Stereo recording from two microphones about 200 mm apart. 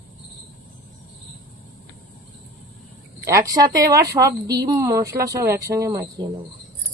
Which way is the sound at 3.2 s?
15° right (ahead or behind).